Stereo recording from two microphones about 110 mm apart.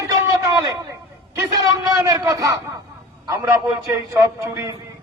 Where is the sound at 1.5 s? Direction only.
35° right (ahead or behind).